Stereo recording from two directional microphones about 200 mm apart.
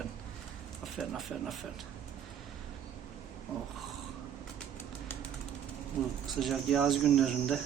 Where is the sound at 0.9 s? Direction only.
Centre (ahead or behind).